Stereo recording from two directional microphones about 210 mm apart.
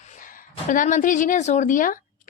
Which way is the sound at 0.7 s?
40° left (ahead or behind).